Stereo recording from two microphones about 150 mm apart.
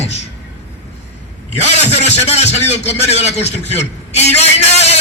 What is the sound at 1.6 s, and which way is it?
A man's voice, 45° left (ahead or behind).